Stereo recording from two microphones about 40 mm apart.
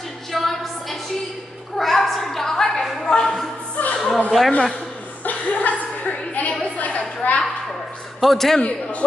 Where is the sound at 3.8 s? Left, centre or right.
Left.